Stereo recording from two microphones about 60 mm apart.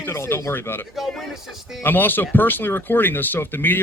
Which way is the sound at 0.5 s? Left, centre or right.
Left.